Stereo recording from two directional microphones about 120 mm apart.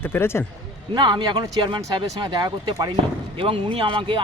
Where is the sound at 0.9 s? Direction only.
40° right (ahead or behind).